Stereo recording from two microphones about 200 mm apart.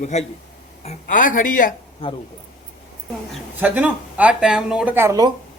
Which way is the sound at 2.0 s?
25° left (ahead or behind).